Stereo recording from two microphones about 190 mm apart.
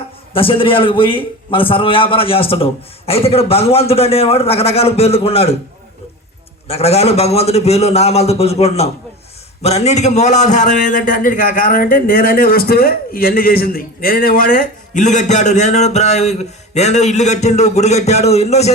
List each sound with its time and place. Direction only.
0.3 s a man's voice: 30° left (ahead or behind)
6.7 s a man's voice: 35° left (ahead or behind)